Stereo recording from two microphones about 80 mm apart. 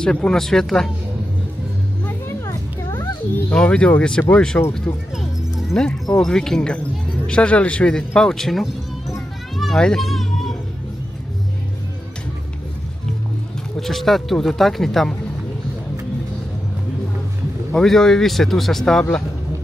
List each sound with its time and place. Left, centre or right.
0.0 s a man's voice: centre
2.0 s children playing: left
3.5 s a man's voice: centre
4.9 s speech: left
5.7 s a man's voice: centre
9.6 s children playing: centre
13.7 s speech: centre
17.7 s speech: centre